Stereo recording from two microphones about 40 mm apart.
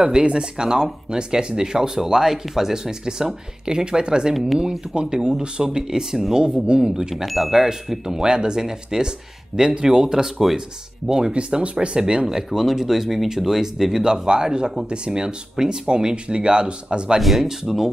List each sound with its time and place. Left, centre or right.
0.1 s speech: right
7.0 s speech: centre
17.2 s speech: centre